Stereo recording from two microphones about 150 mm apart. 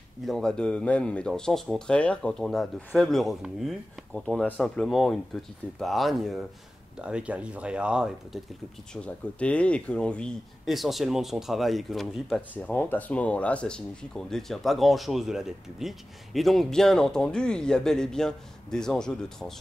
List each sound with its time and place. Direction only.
0.3 s speech: 5° left (ahead or behind)
8.9 s speech: 10° left (ahead or behind)